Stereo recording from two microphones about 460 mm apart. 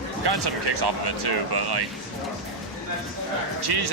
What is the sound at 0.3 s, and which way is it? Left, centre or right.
Speech, right.